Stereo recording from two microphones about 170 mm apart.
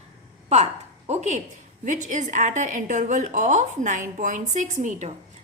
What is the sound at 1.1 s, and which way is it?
A woman's voice, 40° right (ahead or behind).